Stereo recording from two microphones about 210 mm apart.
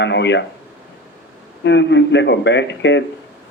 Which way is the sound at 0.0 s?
55° left (ahead or behind).